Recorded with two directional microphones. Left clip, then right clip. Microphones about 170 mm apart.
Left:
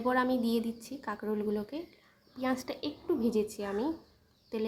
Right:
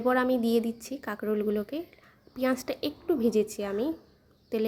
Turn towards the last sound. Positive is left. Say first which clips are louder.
# right 6 dB
turn(degrees=-20)  # may be behind; listen again after turning